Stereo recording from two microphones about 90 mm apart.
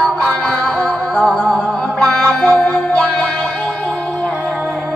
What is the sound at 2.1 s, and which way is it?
Music, 15° left (ahead or behind).